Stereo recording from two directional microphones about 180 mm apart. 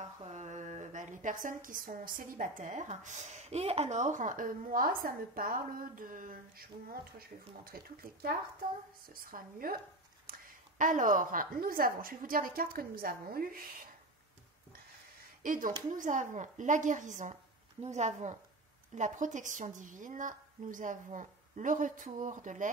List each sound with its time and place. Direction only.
0.0 s speech: 40° right (ahead or behind)
15.4 s speech: 45° right (ahead or behind)